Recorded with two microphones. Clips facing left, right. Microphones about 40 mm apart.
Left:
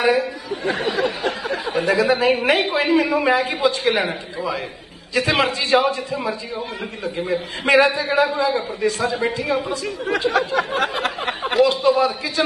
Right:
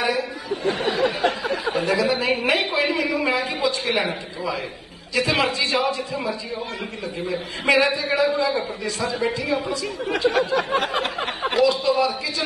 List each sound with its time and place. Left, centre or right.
0.0 s a sound: left
1.8 s a woman's voice: left
5.1 s a woman's voice: left